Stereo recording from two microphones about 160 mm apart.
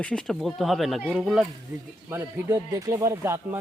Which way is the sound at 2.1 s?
20° right (ahead or behind).